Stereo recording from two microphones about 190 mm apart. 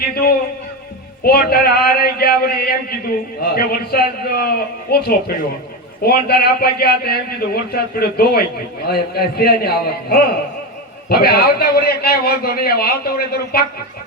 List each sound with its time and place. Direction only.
0.1 s a man's voice: 55° left (ahead or behind)